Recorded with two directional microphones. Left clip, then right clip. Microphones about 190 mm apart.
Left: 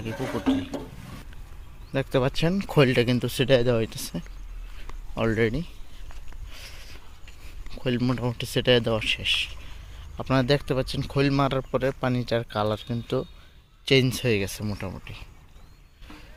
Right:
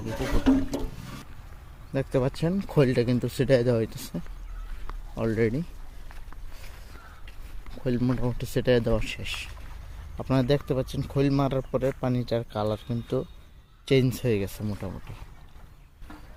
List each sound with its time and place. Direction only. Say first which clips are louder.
0.4 s a sound: right 4 dB; 30° right (ahead or behind)
1.9 s speech: left 2 dB; centre (ahead or behind)
7.8 s speech: left 1 dB; centre (ahead or behind)